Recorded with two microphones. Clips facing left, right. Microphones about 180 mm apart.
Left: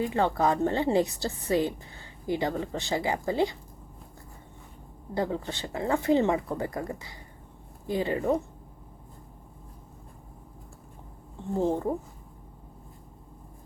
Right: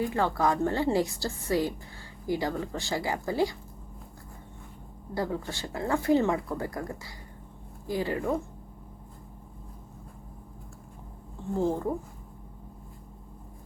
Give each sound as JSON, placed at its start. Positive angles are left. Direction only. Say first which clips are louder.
{"t": 0.0, "sound": "speech", "louder": "left 1 dB", "side_deg": 20}
{"t": 5.1, "sound": "speech", "louder": "left 2 dB", "side_deg": 20}
{"t": 11.5, "sound": "speech", "louder": "left 1 dB", "side_deg": 20}